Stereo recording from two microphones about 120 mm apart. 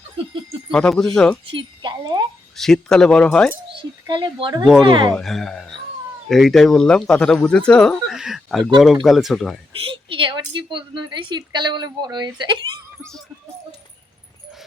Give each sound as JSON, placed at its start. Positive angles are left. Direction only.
{"t": 0.7, "sound": "speech", "side_deg": 5}
{"t": 1.5, "sound": "speech", "side_deg": -40}
{"t": 2.6, "sound": "speech", "side_deg": 5}
{"t": 3.7, "sound": "a woman's voice", "side_deg": -45}
{"t": 5.1, "sound": "speech", "side_deg": 5}
{"t": 9.8, "sound": "a woman's voice", "side_deg": -45}
{"t": 13.0, "sound": "speech", "side_deg": 5}